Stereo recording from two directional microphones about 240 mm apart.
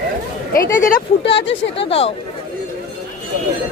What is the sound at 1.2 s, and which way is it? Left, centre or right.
Speech, left.